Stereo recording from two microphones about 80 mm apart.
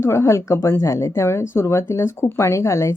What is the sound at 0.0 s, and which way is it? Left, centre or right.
Speech, left.